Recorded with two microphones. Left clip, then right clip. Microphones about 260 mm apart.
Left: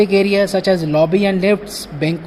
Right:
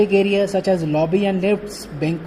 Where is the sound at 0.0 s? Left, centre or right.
Centre.